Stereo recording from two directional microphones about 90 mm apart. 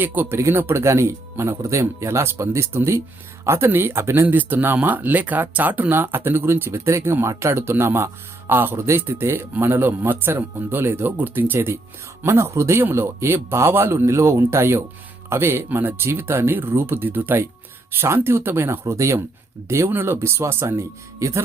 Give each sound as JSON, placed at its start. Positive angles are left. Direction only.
{"t": 0.0, "sound": "speech", "side_deg": -20}
{"t": 0.3, "sound": "speech", "side_deg": -30}